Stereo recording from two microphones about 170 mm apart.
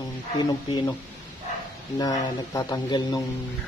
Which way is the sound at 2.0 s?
25° left (ahead or behind).